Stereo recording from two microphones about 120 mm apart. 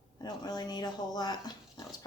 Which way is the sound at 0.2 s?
35° left (ahead or behind).